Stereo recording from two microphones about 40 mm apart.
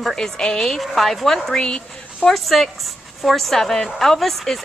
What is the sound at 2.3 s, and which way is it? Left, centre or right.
A woman's voice, centre.